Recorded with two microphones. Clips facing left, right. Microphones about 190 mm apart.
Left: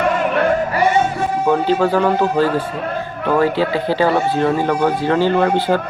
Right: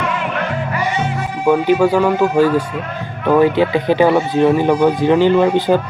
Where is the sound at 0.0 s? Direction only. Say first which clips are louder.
Left 5 dB; 45° left (ahead or behind).